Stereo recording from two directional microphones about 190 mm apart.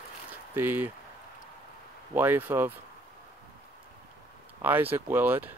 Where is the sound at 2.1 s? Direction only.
10° right (ahead or behind).